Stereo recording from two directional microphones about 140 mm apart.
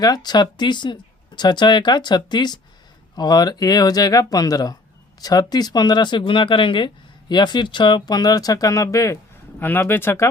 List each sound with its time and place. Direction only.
0.0 s speech: 30° left (ahead or behind)